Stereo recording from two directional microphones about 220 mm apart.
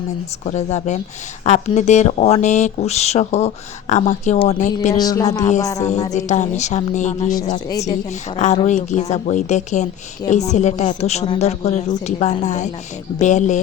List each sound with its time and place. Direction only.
0.4 s speech: 30° left (ahead or behind)
4.9 s speech: 15° left (ahead or behind)
6.1 s speech: 30° left (ahead or behind)
8.4 s speech: 35° left (ahead or behind)